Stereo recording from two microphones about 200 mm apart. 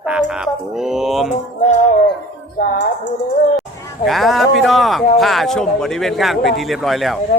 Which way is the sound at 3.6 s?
Centre (ahead or behind).